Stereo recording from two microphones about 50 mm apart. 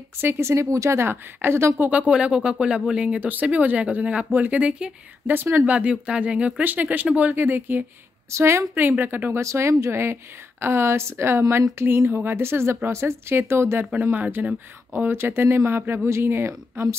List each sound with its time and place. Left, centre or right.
0.2 s speech: right
0.5 s speech: right
1.0 s speech: right
1.9 s speech: right
3.3 s a woman's voice: right
4.6 s speech: right
5.2 s speech: right
5.7 s speech: right
6.6 s a woman's voice: right
8.3 s speech: right
8.7 s a woman's voice: right
9.3 s speech: right
14.4 s a woman's voice: right
15.0 s speech: right